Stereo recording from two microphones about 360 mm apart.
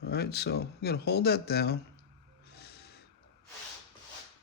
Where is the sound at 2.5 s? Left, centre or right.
Left.